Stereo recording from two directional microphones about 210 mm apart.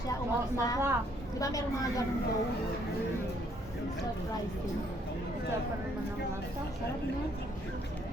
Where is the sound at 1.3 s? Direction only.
15° left (ahead or behind).